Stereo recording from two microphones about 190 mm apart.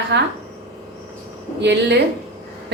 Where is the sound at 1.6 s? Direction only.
65° right (ahead or behind).